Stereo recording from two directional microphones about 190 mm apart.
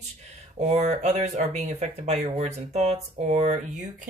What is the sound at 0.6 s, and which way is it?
A woman's voice, 35° right (ahead or behind).